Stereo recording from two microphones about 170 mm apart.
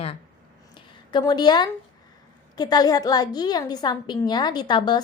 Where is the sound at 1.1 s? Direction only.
25° left (ahead or behind).